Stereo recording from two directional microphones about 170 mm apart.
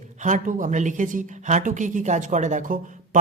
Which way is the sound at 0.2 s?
45° right (ahead or behind).